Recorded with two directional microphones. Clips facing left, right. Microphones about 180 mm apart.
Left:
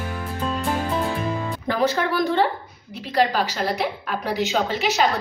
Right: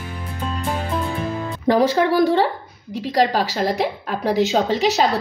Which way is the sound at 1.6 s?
35° right (ahead or behind).